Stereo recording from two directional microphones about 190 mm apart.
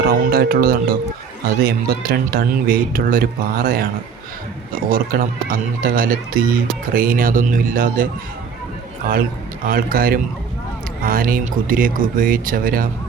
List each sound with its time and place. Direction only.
0.0 s speech: 50° right (ahead or behind)
4.9 s speech: 50° right (ahead or behind)
9.6 s speech: 50° right (ahead or behind)